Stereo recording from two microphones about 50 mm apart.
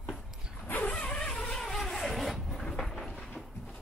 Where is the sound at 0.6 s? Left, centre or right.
Left.